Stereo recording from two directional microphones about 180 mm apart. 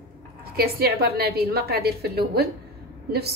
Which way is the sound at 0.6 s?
60° right (ahead or behind).